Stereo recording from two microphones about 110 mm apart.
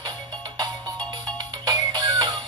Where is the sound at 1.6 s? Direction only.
40° right (ahead or behind).